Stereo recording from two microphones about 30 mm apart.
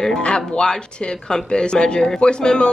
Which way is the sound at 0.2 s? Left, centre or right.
Left.